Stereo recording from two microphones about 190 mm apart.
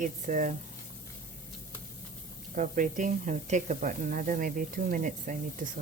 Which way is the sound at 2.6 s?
45° right (ahead or behind).